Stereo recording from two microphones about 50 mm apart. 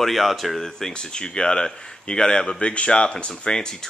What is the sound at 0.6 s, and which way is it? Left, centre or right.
Speech, centre.